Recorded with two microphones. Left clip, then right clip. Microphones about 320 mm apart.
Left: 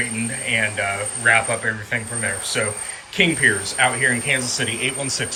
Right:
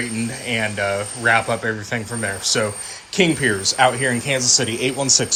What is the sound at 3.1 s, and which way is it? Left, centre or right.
Speech, centre.